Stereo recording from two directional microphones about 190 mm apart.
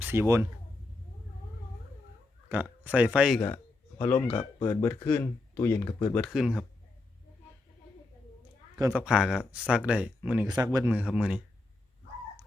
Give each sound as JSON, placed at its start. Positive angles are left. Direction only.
{"t": 0.0, "sound": "speech", "side_deg": -10}
{"t": 2.5, "sound": "speech", "side_deg": -10}
{"t": 3.4, "sound": "a sound", "side_deg": 10}
{"t": 4.7, "sound": "speech", "side_deg": 10}
{"t": 6.3, "sound": "speech", "side_deg": -5}
{"t": 9.0, "sound": "speech", "side_deg": -5}
{"t": 10.5, "sound": "speech", "side_deg": -20}
{"t": 10.8, "sound": "speech", "side_deg": -5}